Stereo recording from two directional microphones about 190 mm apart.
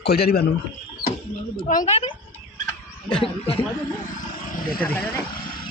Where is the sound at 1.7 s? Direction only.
40° left (ahead or behind).